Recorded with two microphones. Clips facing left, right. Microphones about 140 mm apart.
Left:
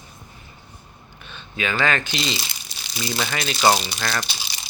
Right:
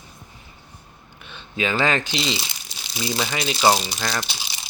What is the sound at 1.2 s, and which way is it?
Speech, 20° right (ahead or behind).